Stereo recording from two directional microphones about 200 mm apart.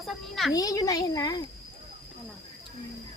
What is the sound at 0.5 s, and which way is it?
Speech, 20° left (ahead or behind).